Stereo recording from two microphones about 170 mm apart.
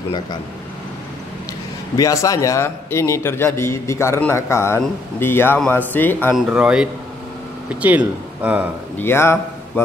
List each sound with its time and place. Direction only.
2.0 s a man's voice: 20° left (ahead or behind)
6.3 s speech: 5° right (ahead or behind)
8.9 s a man's voice: 15° left (ahead or behind)